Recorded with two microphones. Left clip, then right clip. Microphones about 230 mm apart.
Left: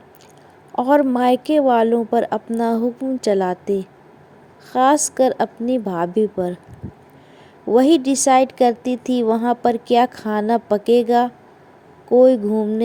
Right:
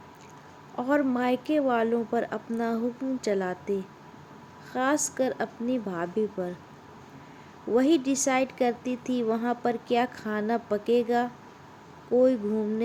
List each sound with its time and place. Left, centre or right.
0.8 s a woman's voice: left
7.7 s a woman's voice: left